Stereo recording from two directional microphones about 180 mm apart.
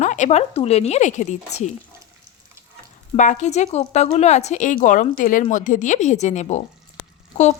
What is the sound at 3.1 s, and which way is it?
A woman's voice, 45° left (ahead or behind).